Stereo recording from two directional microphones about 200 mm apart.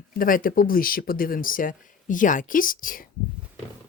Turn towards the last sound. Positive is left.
turn(degrees=45)  # may be behind; listen again after turning